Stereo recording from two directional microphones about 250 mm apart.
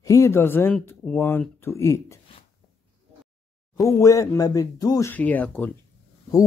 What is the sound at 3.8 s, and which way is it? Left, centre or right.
Speech, centre.